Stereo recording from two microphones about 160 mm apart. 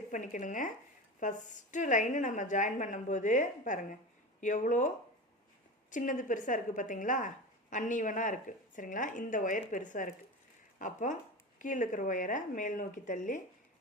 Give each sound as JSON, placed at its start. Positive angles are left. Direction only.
{"t": 0.1, "sound": "a woman's voice", "side_deg": 50}
{"t": 5.9, "sound": "a woman's voice", "side_deg": 55}